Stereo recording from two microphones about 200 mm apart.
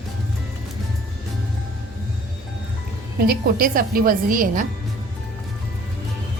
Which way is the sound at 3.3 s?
45° right (ahead or behind).